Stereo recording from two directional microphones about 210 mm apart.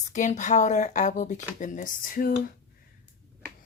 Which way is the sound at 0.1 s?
35° left (ahead or behind).